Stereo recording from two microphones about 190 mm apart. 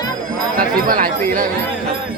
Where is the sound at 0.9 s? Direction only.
45° right (ahead or behind).